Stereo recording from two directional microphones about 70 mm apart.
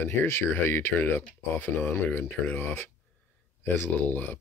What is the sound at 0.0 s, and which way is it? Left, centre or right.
Speech, left.